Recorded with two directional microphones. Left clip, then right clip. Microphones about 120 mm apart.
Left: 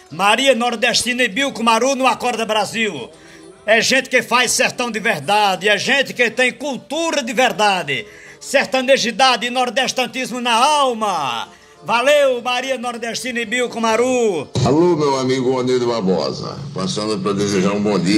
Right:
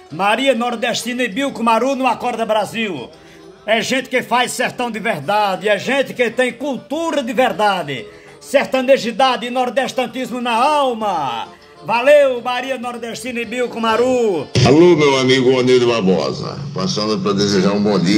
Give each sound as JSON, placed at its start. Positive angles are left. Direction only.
{"t": 0.2, "sound": "speech", "side_deg": 0}
{"t": 2.7, "sound": "speech", "side_deg": -15}
{"t": 8.5, "sound": "speech", "side_deg": -10}
{"t": 9.1, "sound": "a man's voice", "side_deg": 0}
{"t": 14.5, "sound": "speech", "side_deg": -30}
{"t": 16.7, "sound": "a man's voice", "side_deg": 35}